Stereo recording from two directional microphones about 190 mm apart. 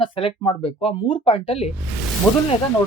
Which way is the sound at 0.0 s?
30° left (ahead or behind).